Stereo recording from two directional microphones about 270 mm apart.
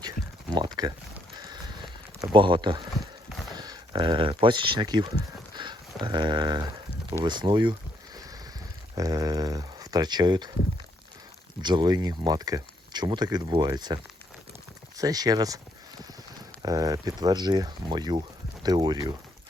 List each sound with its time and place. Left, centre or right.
0.5 s a sound: centre
2.2 s speech: centre
7.3 s a sound: centre
9.0 s speech: centre
11.6 s speech: centre
16.6 s speech: centre